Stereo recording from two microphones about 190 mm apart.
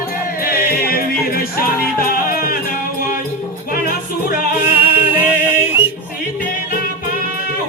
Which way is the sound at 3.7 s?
50° left (ahead or behind).